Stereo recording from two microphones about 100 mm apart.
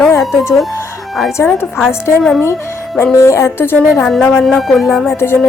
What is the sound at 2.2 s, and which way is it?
Speech, 5° left (ahead or behind).